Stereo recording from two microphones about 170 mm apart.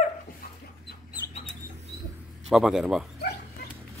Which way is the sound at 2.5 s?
5° right (ahead or behind).